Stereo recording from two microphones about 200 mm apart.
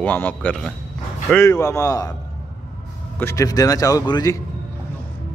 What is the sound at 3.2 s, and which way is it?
Speech, 15° left (ahead or behind).